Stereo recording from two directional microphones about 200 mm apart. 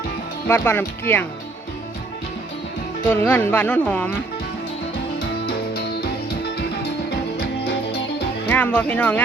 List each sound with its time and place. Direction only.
0.4 s speech: 10° left (ahead or behind)
3.1 s speech: 10° left (ahead or behind)
5.5 s music: 55° left (ahead or behind)
8.4 s speech: 10° left (ahead or behind)